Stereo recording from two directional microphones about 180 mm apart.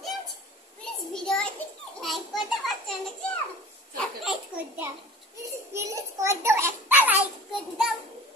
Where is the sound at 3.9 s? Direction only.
Centre (ahead or behind).